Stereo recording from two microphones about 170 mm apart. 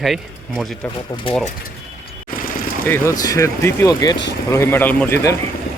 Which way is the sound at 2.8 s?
15° left (ahead or behind).